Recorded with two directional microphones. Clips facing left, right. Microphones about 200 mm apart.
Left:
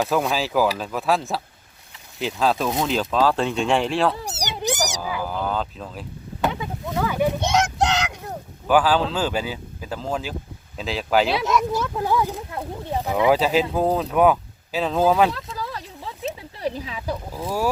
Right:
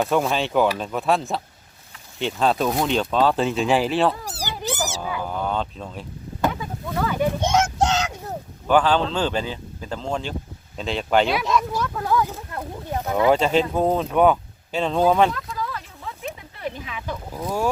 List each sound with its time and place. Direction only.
0.0 s speech: centre (ahead or behind)
4.2 s cat: 20° left (ahead or behind)
4.9 s a sound: centre (ahead or behind)
6.4 s speech: 15° left (ahead or behind)
8.6 s speech: 5° left (ahead or behind)
11.7 s a sound: 20° left (ahead or behind)
13.1 s speech: centre (ahead or behind)
15.3 s a sound: 30° left (ahead or behind)
17.3 s speech: 5° left (ahead or behind)